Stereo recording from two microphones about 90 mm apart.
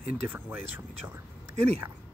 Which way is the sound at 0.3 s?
20° right (ahead or behind).